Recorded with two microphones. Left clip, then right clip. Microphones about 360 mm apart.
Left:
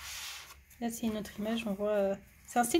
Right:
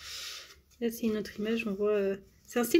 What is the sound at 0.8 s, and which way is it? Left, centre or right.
Speech, left.